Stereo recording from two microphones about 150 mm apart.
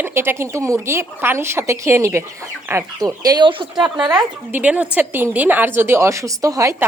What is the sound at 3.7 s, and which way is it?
Speech, 5° right (ahead or behind).